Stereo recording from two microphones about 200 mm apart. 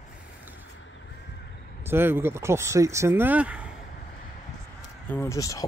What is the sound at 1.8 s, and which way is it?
Speech, 10° right (ahead or behind).